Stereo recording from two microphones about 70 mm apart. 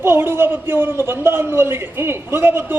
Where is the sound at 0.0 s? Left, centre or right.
Right.